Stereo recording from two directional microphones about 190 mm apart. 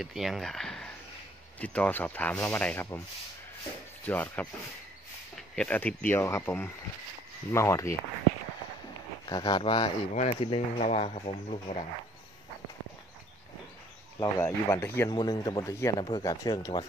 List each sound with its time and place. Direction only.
0.0 s speech: centre (ahead or behind)
4.0 s speech: 10° left (ahead or behind)
5.6 s speech: 10° left (ahead or behind)
9.3 s speech: 20° left (ahead or behind)
14.2 s speech: 15° left (ahead or behind)